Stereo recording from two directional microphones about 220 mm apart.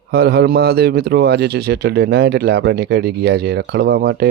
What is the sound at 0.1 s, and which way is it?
A man's voice, 45° right (ahead or behind).